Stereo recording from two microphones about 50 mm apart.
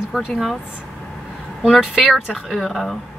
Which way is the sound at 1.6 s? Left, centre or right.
Centre.